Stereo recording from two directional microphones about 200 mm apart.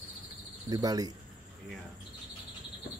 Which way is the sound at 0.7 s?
20° right (ahead or behind).